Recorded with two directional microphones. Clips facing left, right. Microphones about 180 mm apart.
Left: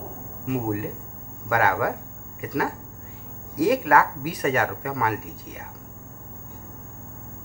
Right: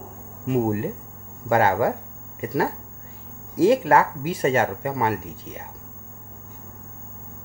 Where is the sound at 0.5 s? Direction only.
30° right (ahead or behind).